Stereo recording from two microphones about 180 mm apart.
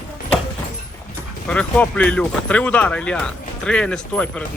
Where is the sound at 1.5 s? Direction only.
5° left (ahead or behind).